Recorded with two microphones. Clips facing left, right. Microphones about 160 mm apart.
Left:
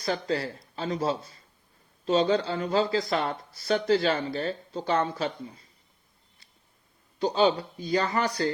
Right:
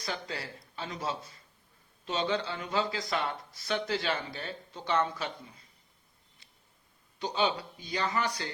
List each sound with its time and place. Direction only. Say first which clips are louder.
0.0 s speech: left 9 dB; 35° left (ahead or behind)
7.2 s speech: left 7 dB; 40° left (ahead or behind)